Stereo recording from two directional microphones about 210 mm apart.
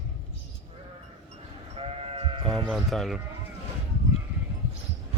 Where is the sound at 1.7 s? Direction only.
30° right (ahead or behind).